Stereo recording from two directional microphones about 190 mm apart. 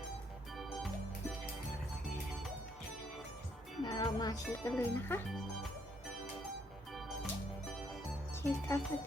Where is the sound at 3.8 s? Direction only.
25° left (ahead or behind).